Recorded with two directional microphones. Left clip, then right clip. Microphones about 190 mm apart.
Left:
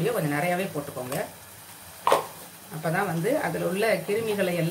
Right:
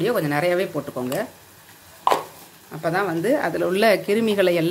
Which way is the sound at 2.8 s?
50° right (ahead or behind).